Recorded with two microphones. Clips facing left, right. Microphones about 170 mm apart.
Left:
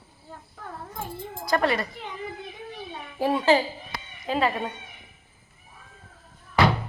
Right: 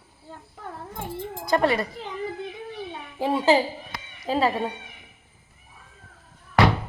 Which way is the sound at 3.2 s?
20° right (ahead or behind).